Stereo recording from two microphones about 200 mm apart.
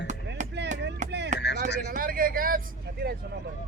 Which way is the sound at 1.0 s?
60° right (ahead or behind).